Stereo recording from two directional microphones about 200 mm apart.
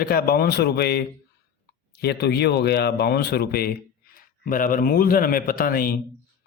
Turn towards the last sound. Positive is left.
turn(degrees=45)  # may be behind; listen again after turning